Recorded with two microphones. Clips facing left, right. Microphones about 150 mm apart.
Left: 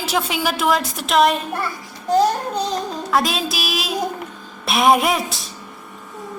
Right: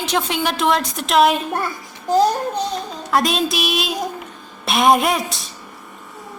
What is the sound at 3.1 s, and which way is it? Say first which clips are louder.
A woman's voice: right 3 dB; centre (ahead or behind).